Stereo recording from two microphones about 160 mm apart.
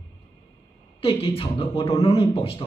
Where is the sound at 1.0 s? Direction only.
35° left (ahead or behind).